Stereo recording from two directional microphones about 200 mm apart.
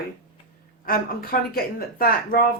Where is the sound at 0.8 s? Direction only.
45° left (ahead or behind).